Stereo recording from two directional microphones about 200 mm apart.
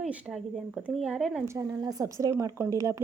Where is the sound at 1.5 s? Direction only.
15° right (ahead or behind).